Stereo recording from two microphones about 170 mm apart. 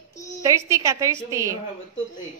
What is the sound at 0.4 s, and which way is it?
A woman's voice, 20° right (ahead or behind).